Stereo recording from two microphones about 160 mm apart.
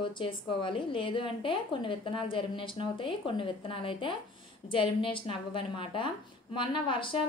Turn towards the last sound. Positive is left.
turn(degrees=30)  # may be behind; listen again after turning